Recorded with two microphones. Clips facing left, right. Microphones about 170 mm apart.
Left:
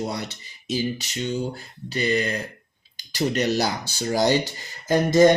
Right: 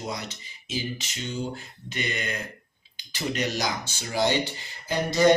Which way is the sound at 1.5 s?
35° left (ahead or behind).